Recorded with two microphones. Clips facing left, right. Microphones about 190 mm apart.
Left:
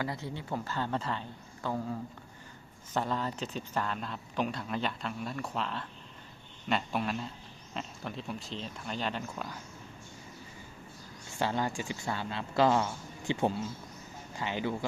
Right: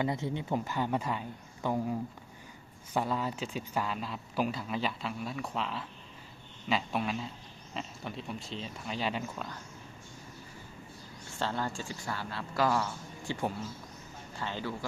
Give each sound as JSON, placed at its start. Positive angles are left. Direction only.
{"t": 0.0, "sound": "speech", "side_deg": -20}
{"t": 11.3, "sound": "speech", "side_deg": 15}